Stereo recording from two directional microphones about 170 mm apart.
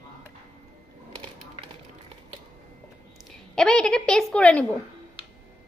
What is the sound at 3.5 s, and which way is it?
A woman's voice, 5° left (ahead or behind).